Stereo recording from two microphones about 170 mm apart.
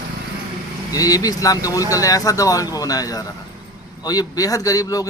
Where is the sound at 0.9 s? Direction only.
20° left (ahead or behind).